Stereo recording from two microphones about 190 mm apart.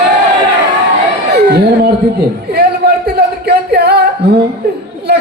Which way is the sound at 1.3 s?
60° right (ahead or behind).